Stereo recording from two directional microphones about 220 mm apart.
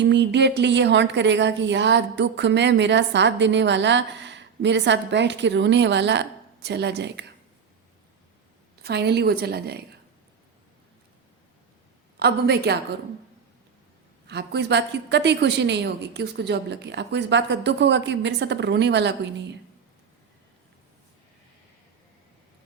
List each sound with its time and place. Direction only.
0.0 s speech: 50° right (ahead or behind)
8.8 s speech: 50° right (ahead or behind)
12.2 s speech: 45° right (ahead or behind)
14.3 s speech: 50° right (ahead or behind)